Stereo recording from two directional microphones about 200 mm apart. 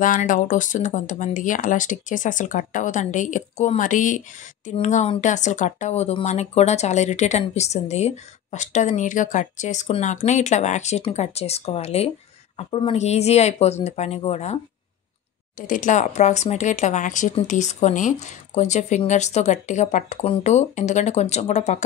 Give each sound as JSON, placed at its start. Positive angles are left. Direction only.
{"t": 0.0, "sound": "speech", "side_deg": 40}